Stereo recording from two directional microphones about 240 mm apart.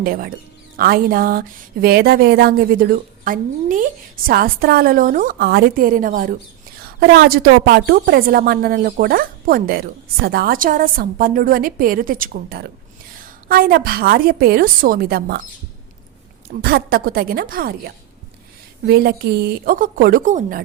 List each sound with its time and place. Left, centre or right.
0.0 s a woman's voice: right
16.6 s a woman's voice: right